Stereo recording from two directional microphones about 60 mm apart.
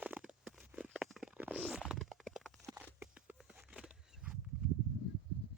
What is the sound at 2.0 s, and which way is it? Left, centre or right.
Stomach rumble, centre.